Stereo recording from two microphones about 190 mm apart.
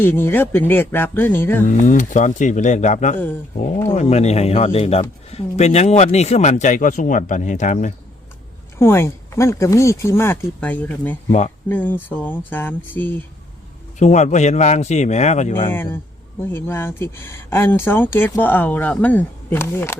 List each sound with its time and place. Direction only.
0.0 s speech: 10° left (ahead or behind)
1.6 s speech: 40° left (ahead or behind)
8.8 s speech: 15° left (ahead or behind)
11.3 s speech: 35° left (ahead or behind)
11.7 s speech: 10° left (ahead or behind)
14.0 s speech: 40° left (ahead or behind)
15.7 s speech: 10° left (ahead or behind)